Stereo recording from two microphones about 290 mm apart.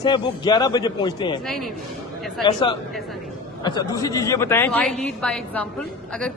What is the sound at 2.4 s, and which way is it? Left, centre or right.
A man's voice, centre.